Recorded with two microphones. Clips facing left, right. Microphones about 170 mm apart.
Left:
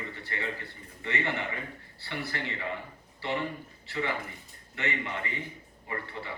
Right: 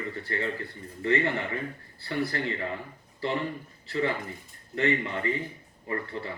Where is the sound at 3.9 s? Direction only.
40° right (ahead or behind).